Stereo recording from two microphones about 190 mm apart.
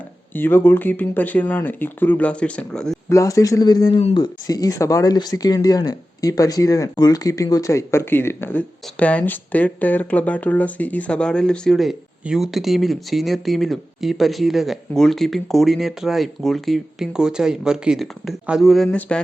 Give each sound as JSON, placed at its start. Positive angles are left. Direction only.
{"t": 0.3, "sound": "speech", "side_deg": 10}
{"t": 3.1, "sound": "speech", "side_deg": 15}